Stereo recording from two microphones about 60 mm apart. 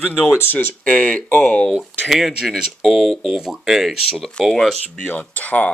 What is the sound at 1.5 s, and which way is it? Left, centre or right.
Speech, centre.